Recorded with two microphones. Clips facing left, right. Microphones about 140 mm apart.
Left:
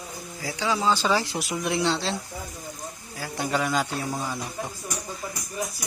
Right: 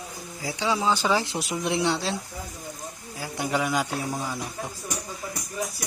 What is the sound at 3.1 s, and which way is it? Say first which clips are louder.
Speech: even; 15° right (ahead or behind).